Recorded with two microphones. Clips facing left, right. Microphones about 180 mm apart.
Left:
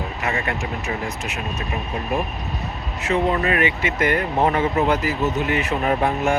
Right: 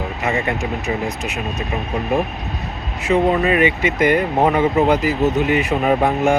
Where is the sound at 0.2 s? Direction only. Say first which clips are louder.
Right 5 dB; 20° right (ahead or behind).